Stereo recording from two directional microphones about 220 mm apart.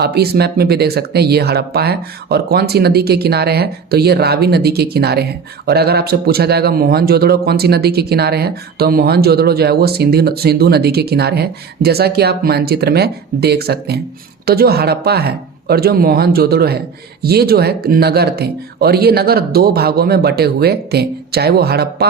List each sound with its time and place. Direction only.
0.0 s speech: 45° right (ahead or behind)